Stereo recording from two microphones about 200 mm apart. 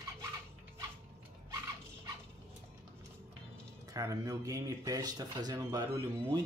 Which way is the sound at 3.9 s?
15° right (ahead or behind).